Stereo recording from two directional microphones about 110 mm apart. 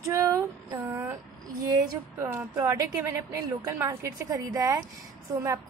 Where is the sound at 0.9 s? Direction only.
20° right (ahead or behind).